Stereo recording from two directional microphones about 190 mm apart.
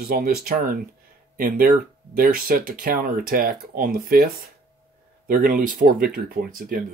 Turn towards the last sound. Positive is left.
turn(degrees=-50)  # may be behind; listen again after turning